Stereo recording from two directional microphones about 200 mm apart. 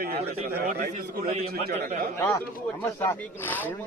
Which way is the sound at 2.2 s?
15° left (ahead or behind).